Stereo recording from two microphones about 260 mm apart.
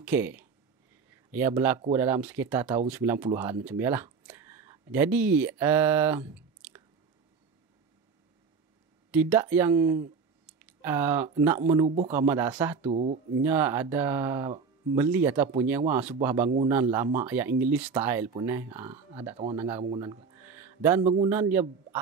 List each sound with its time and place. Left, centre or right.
0.0 s speech: centre
9.1 s speech: centre
11.8 s a man's voice: right
12.1 s speech: centre
12.9 s a man's voice: right
13.4 s speech: centre
19.8 s a man's voice: centre
20.4 s music: centre
21.0 s a man's voice: right
21.3 s speech: centre